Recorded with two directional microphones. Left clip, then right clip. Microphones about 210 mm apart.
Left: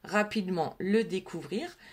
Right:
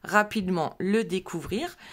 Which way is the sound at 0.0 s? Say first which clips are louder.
Right 6 dB; 35° right (ahead or behind).